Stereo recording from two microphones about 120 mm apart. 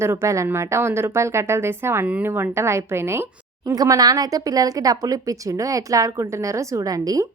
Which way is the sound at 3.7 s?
30° right (ahead or behind).